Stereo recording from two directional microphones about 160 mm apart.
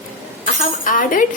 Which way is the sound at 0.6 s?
55° left (ahead or behind).